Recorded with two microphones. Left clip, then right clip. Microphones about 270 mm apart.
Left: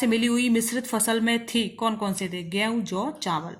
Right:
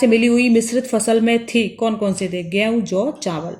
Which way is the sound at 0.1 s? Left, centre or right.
Centre.